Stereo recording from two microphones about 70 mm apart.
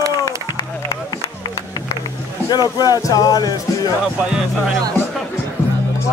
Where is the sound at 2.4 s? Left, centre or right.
Left.